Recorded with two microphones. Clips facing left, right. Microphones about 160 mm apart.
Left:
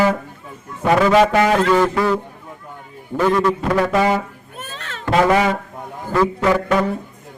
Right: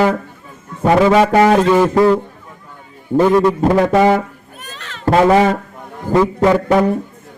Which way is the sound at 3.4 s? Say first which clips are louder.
Right 5 dB; 25° right (ahead or behind).